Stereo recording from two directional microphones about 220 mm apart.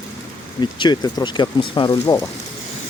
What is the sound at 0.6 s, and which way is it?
Speech, 20° left (ahead or behind).